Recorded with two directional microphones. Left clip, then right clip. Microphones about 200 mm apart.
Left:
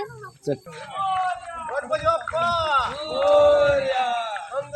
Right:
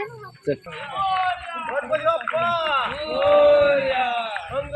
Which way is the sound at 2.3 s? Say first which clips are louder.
Even; 10° left (ahead or behind).